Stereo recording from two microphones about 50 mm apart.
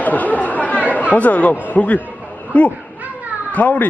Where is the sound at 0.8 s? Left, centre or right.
Right.